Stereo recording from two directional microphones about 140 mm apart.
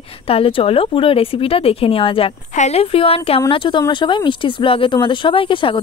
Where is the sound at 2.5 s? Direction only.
50° left (ahead or behind).